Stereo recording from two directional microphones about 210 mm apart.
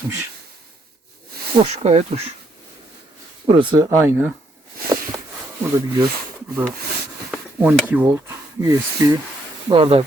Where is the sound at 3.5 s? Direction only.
20° right (ahead or behind).